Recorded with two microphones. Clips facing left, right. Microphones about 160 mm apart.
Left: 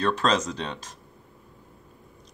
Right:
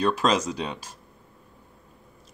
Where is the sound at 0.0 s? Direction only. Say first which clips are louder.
Right 1 dB; 10° right (ahead or behind).